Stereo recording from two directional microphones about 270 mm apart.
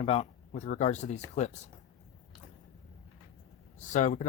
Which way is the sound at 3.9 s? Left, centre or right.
Left.